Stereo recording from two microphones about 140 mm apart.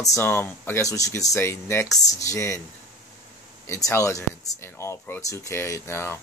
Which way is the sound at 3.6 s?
20° left (ahead or behind).